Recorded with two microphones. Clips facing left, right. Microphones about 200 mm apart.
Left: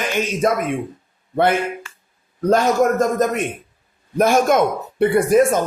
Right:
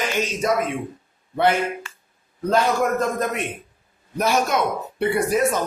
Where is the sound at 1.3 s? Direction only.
50° left (ahead or behind).